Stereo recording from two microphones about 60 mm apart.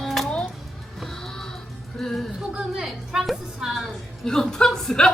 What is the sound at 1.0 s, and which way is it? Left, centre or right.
Music, centre.